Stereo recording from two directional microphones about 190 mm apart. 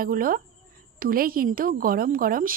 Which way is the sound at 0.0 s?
50° right (ahead or behind).